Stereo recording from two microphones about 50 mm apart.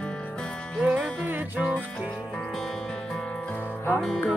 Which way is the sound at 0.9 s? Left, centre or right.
Right.